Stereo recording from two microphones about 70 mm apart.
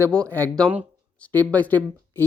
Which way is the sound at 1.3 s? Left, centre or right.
Left.